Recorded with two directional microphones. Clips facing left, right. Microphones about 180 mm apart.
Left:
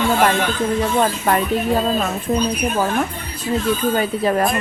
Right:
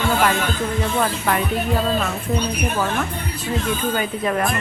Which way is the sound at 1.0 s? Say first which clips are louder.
Left 2 dB; 35° left (ahead or behind).